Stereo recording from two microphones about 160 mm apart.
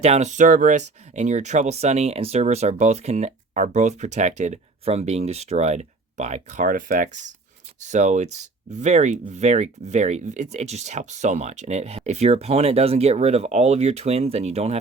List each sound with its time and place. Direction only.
0.0 s speech: 45° right (ahead or behind)